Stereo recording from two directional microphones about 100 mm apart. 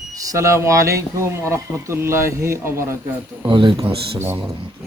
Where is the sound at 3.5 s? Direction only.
50° right (ahead or behind).